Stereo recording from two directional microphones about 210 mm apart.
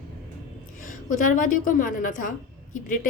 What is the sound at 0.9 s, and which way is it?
A woman's voice, 40° left (ahead or behind).